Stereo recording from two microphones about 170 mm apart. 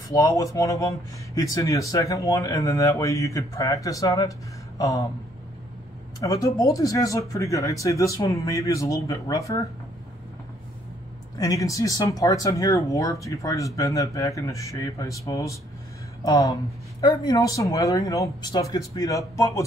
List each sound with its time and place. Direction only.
0.1 s speech: 20° left (ahead or behind)
6.1 s speech: 20° left (ahead or behind)
11.3 s speech: 20° left (ahead or behind)